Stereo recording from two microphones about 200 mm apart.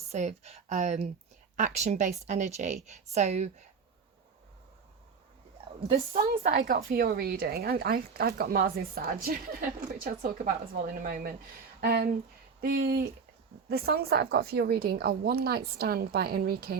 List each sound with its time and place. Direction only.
0.1 s a woman's voice: 35° right (ahead or behind)
5.9 s a woman's voice: 30° right (ahead or behind)
6.6 s speech: 45° right (ahead or behind)